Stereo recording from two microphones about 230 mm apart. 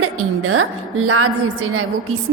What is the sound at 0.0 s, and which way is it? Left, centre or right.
A woman's voice, right.